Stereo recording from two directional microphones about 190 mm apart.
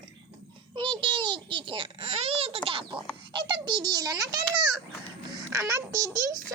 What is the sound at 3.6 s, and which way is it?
A child's voice, 20° right (ahead or behind).